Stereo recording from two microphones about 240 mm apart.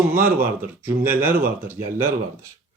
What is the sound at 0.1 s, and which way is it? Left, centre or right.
Speech, centre.